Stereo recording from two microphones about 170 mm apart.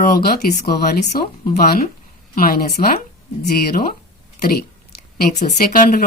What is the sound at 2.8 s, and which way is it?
Speech, 30° left (ahead or behind).